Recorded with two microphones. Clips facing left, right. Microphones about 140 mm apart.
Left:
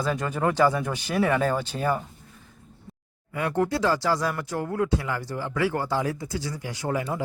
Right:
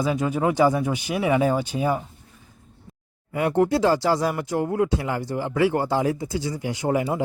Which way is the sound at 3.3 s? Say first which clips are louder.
Right 5 dB; 25° right (ahead or behind).